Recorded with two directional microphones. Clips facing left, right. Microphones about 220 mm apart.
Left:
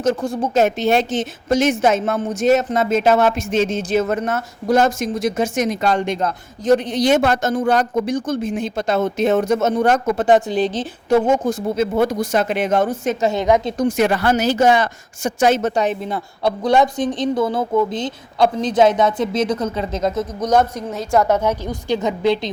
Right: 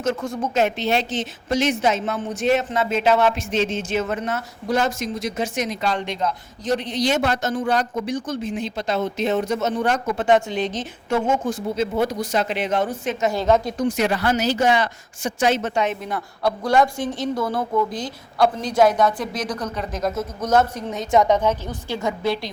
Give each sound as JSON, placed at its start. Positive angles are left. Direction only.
{"t": 0.0, "sound": "a woman's voice", "side_deg": 35}
{"t": 13.2, "sound": "speech", "side_deg": 20}
{"t": 13.7, "sound": "speech", "side_deg": 50}
{"t": 20.9, "sound": "a woman's voice", "side_deg": 0}